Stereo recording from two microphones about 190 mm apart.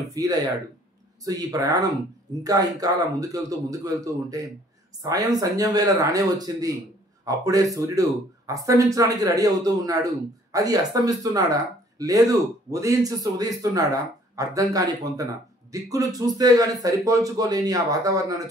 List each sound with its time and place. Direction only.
0.1 s speech: 20° right (ahead or behind)